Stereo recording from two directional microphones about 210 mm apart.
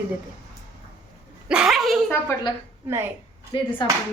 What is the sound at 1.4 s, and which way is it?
Speech, 5° right (ahead or behind).